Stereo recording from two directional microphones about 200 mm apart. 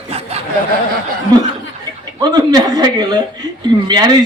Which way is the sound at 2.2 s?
20° right (ahead or behind).